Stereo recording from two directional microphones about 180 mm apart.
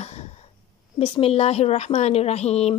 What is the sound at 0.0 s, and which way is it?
Wheeze, 35° left (ahead or behind).